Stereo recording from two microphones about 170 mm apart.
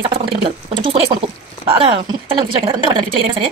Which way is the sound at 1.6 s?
30° right (ahead or behind).